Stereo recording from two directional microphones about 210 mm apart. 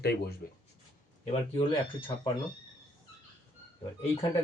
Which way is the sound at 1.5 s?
25° left (ahead or behind).